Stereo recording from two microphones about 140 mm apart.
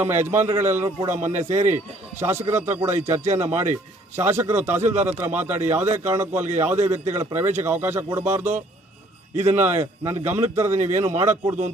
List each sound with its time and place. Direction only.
0.0 s a man's voice: 15° right (ahead or behind)